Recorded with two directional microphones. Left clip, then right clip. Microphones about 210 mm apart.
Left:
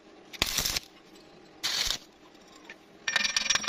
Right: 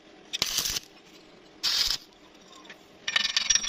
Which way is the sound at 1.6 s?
25° left (ahead or behind).